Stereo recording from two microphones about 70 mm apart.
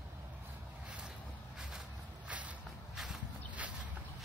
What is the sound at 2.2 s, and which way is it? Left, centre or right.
Vehicle, centre.